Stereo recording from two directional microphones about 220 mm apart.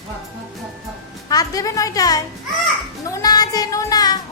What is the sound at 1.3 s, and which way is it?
A woman's voice, 15° left (ahead or behind).